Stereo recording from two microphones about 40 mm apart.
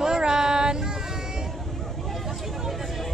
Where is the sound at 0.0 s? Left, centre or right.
Centre.